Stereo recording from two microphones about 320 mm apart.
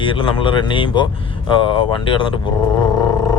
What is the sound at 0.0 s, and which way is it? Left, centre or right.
Speech, centre.